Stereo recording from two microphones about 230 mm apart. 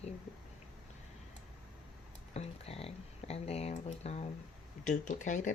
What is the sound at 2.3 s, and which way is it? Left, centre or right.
A woman's voice, left.